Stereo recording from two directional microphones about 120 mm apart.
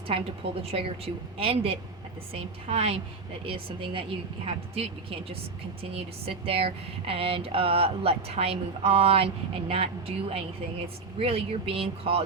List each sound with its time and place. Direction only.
0.6 s speech: 55° right (ahead or behind)